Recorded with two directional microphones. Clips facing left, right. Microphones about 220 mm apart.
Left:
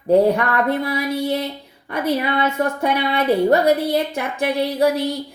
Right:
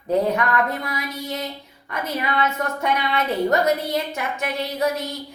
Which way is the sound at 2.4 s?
30° left (ahead or behind).